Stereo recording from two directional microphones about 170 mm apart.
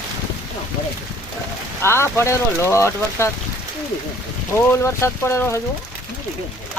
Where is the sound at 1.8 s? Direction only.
15° left (ahead or behind).